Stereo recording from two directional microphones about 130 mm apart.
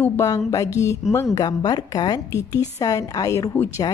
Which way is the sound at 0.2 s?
25° left (ahead or behind).